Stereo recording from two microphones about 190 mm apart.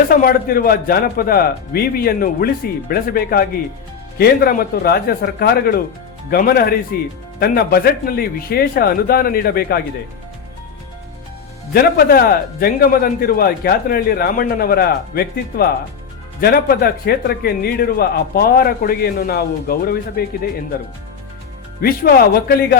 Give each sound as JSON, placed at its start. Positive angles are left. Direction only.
{"t": 0.1, "sound": "a man's voice", "side_deg": 50}
{"t": 11.7, "sound": "a man's voice", "side_deg": 55}
{"t": 21.8, "sound": "a man's voice", "side_deg": 55}